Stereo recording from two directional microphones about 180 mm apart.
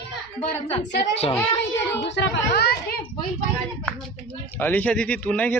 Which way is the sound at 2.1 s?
60° left (ahead or behind).